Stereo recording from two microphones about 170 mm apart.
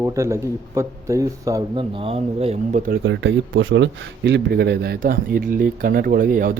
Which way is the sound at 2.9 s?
90° right.